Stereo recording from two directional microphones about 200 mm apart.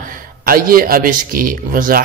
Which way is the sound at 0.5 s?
45° right (ahead or behind).